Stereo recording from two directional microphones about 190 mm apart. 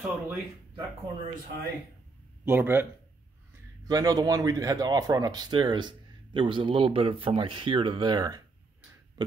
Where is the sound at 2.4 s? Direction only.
10° right (ahead or behind).